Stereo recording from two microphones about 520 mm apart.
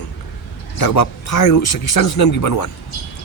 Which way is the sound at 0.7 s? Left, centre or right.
Left.